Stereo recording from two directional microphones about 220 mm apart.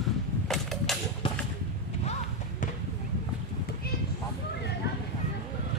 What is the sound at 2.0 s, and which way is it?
Basketball bounce, 30° left (ahead or behind).